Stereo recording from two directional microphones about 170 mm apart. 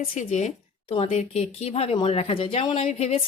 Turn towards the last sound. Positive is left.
turn(degrees=40)  # may be behind; listen again after turning